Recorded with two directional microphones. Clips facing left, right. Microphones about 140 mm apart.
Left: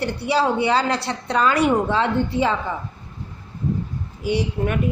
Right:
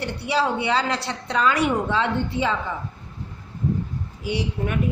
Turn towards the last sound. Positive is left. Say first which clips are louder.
# left 4 dB
turn(degrees=45)  # may be behind; listen again after turning